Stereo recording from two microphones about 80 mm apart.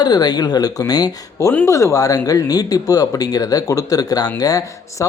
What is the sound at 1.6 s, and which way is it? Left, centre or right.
Speech, left.